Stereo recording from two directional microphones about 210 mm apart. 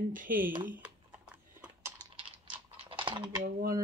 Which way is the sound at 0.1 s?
40° right (ahead or behind).